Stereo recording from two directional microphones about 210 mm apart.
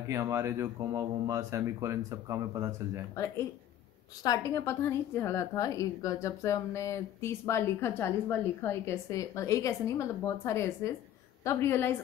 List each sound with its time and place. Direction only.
0.1 s speech: 15° right (ahead or behind)
4.2 s a woman's voice: 15° left (ahead or behind)